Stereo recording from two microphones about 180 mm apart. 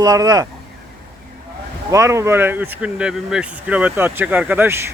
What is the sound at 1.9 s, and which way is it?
Speech, 15° right (ahead or behind).